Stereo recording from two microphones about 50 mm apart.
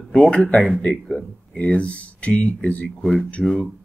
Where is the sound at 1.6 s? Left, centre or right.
Left.